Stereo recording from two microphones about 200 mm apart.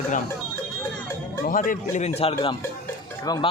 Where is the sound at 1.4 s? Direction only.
40° left (ahead or behind).